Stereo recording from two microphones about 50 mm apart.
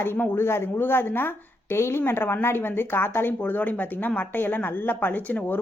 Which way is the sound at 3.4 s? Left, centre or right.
Left.